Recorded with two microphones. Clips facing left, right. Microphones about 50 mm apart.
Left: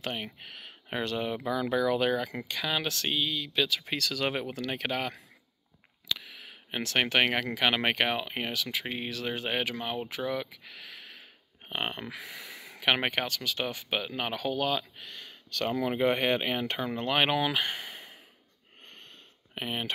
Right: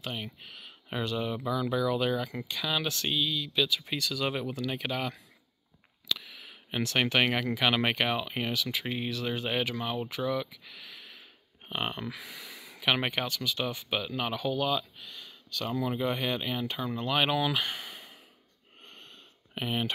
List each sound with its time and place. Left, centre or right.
0.1 s speech: left
3.4 s speech: left
4.3 s speech: left
6.0 s a sound: left
7.5 s speech: left
9.1 s speech: left
11.7 s speech: left
12.8 s speech: left
14.3 s speech: left
19.5 s speech: centre